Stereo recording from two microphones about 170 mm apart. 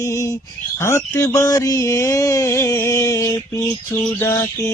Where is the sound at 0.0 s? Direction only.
20° left (ahead or behind).